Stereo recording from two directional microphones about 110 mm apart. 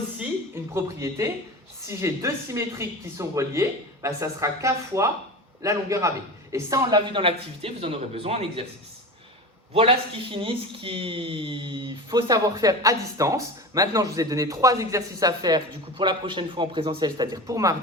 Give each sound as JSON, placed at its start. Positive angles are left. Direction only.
{"t": 0.5, "sound": "speech", "side_deg": -25}
{"t": 7.0, "sound": "a man's voice", "side_deg": -50}
{"t": 9.7, "sound": "speech", "side_deg": -55}